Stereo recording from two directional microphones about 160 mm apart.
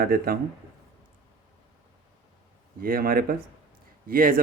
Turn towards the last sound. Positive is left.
turn(degrees=-65)  # may be behind; listen again after turning